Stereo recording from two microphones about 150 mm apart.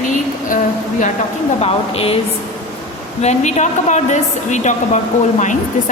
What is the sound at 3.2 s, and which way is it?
A woman's voice, 50° left (ahead or behind).